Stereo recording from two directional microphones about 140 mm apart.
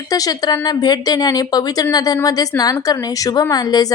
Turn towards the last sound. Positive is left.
turn(degrees=25)  # may be behind; listen again after turning